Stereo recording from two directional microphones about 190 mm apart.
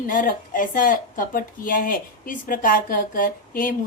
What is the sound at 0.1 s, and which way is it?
A woman's voice, 45° left (ahead or behind).